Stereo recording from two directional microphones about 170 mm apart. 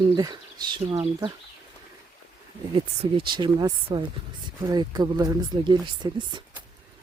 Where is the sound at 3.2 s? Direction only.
25° right (ahead or behind).